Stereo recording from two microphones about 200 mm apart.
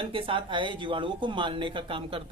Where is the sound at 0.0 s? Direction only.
25° right (ahead or behind).